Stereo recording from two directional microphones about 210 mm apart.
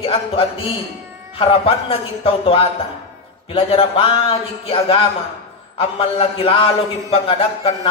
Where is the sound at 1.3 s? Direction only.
25° left (ahead or behind).